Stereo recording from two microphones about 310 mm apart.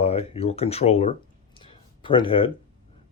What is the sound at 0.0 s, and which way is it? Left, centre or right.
Speech, centre.